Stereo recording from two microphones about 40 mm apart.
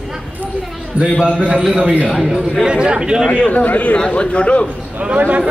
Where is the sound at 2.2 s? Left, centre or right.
Centre.